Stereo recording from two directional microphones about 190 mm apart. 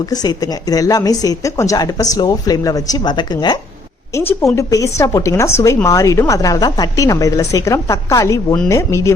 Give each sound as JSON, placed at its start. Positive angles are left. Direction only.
{"t": 0.1, "sound": "a woman's voice", "side_deg": 20}